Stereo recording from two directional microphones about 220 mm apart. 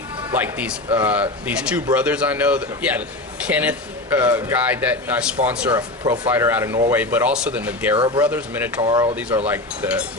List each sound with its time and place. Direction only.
0.3 s speech: 10° right (ahead or behind)
7.9 s speech: 20° right (ahead or behind)
8.2 s speech: 5° right (ahead or behind)
8.8 s speech: 20° right (ahead or behind)
9.5 s speech: 5° right (ahead or behind)